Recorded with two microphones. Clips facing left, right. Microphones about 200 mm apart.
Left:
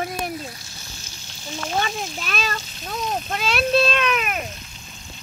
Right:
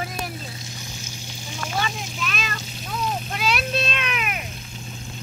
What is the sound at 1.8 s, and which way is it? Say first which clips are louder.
A child's voice: left 1 dB; 40° left (ahead or behind).